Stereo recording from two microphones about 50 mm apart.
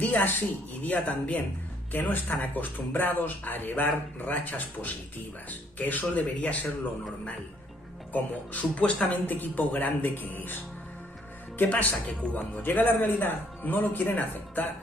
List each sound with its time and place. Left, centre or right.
0.0 s speech: left
8.1 s speech: left
11.7 s speech: left
12.6 s speech: left